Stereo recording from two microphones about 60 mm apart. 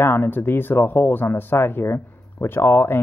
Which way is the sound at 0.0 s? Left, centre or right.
Left.